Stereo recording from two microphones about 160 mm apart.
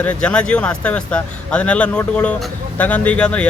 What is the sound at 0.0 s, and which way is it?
Speech, 10° left (ahead or behind).